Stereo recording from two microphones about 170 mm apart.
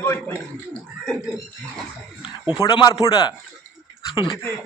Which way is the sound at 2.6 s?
25° left (ahead or behind).